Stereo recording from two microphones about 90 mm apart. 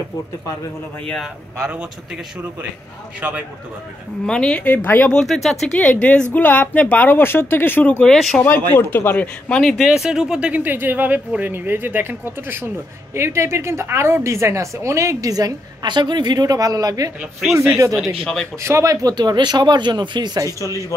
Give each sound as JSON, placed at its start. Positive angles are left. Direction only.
{"t": 1.1, "sound": "speech", "side_deg": 0}
{"t": 3.2, "sound": "speech", "side_deg": -20}
{"t": 4.3, "sound": "speech", "side_deg": 10}
{"t": 5.1, "sound": "speech", "side_deg": 0}
{"t": 5.9, "sound": "speech", "side_deg": 15}
{"t": 8.1, "sound": "speech", "side_deg": 5}
{"t": 8.4, "sound": "speech", "side_deg": 20}
{"t": 9.5, "sound": "speech", "side_deg": 5}
{"t": 9.8, "sound": "a woman's voice", "side_deg": -5}
{"t": 18.2, "sound": "speech", "side_deg": 5}
{"t": 18.6, "sound": "a woman's voice", "side_deg": -35}
{"t": 19.1, "sound": "speech", "side_deg": -55}